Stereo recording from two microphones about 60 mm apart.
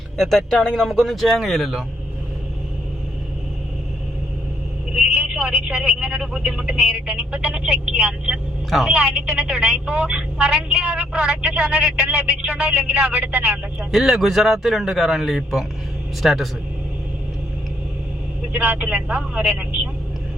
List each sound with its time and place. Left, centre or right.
0.2 s a man's voice: centre
5.1 s speech: centre
8.7 s a man's voice: centre; by 13.6 s right
13.9 s a man's voice: centre
18.5 s a woman's voice: right